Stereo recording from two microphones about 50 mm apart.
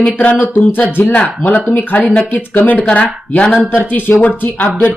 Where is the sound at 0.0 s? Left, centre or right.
Left.